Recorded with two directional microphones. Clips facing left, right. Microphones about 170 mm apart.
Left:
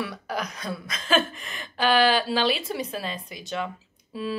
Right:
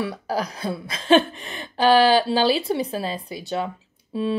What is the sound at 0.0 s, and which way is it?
Speech, 30° right (ahead or behind).